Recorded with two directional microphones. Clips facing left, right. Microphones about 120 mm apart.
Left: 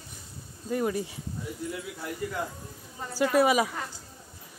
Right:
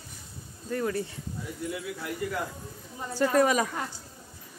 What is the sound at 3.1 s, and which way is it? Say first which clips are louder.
Speech: even; 10° left (ahead or behind).